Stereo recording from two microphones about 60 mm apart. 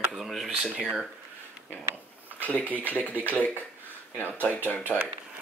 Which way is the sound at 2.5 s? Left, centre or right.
Left.